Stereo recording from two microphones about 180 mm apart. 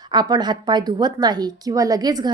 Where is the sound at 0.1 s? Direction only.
25° right (ahead or behind).